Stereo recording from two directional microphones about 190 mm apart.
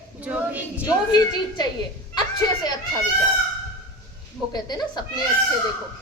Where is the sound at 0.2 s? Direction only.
5° right (ahead or behind).